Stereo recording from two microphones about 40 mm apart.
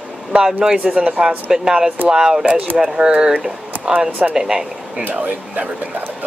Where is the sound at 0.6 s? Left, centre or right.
Right.